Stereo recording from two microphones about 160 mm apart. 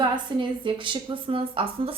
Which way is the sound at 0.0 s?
30° right (ahead or behind).